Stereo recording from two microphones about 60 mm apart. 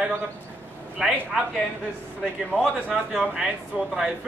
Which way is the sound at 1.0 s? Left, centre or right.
Centre.